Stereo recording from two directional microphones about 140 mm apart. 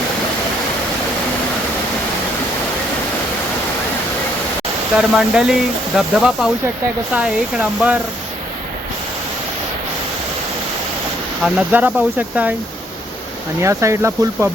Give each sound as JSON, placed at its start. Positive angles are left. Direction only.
{"t": 4.9, "sound": "speech", "side_deg": -5}
{"t": 11.4, "sound": "speech", "side_deg": -10}
{"t": 13.6, "sound": "speech", "side_deg": -20}